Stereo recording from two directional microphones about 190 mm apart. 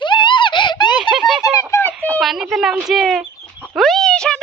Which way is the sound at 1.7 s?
10° left (ahead or behind).